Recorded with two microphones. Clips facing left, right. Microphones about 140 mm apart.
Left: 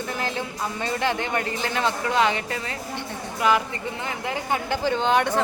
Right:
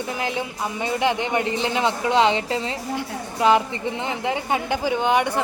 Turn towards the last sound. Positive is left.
turn(degrees=-15)  # may be behind; listen again after turning